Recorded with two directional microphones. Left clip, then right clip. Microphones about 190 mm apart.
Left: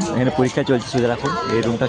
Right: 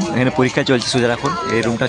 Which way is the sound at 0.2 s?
Centre (ahead or behind).